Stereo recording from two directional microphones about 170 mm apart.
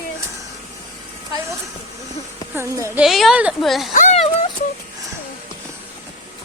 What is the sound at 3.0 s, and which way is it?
Speech, centre (ahead or behind).